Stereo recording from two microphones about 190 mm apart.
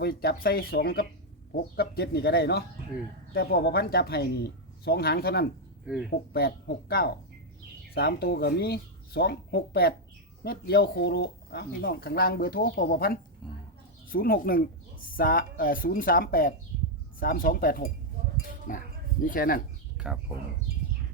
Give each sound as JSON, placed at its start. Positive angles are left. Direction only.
{"t": 0.0, "sound": "speech", "side_deg": 55}
{"t": 5.8, "sound": "speech", "side_deg": -5}
{"t": 6.3, "sound": "speech", "side_deg": 55}
{"t": 13.4, "sound": "mouse", "side_deg": 0}
{"t": 14.1, "sound": "speech", "side_deg": 50}
{"t": 20.0, "sound": "a sound", "side_deg": -5}